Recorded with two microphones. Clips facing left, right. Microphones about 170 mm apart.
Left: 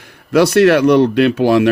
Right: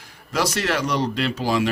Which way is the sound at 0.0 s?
60° left (ahead or behind).